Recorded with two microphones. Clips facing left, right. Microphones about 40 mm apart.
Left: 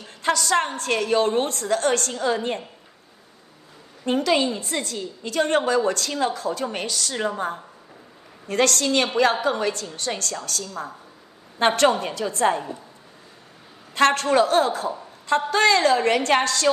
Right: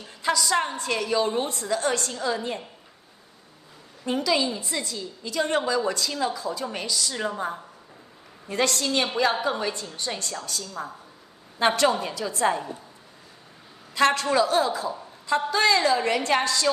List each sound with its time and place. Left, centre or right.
0.0 s a woman's voice: left
4.0 s a woman's voice: left
8.5 s a woman's voice: left
11.5 s a woman's voice: left
13.9 s a woman's voice: left